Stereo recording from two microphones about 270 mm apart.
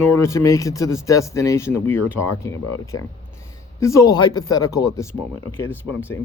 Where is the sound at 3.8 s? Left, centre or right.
Centre.